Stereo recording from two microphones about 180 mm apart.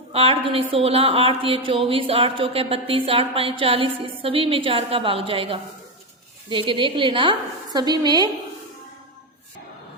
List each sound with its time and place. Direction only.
0.1 s a woman's voice: 30° right (ahead or behind)